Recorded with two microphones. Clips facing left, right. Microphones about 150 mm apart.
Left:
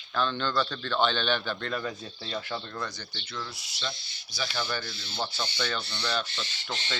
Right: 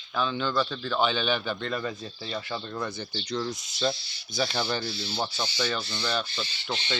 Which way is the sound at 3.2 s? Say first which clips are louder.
Right 9 dB; 40° right (ahead or behind).